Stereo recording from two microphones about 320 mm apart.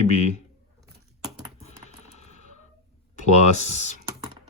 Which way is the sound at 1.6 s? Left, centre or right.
Left.